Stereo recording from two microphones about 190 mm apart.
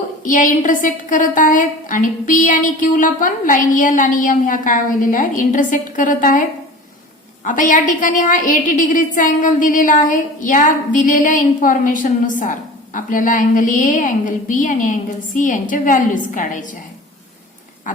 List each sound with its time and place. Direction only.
0.3 s a woman's voice: 45° left (ahead or behind)
7.4 s a woman's voice: 45° left (ahead or behind)
17.9 s a woman's voice: 45° left (ahead or behind)